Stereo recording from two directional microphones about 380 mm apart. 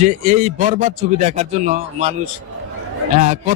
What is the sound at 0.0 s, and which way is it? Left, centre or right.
Speech, centre.